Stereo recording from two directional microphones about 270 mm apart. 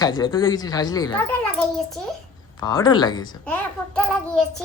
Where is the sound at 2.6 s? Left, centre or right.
Centre.